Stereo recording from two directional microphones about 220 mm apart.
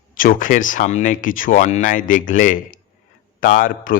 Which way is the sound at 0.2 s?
40° left (ahead or behind).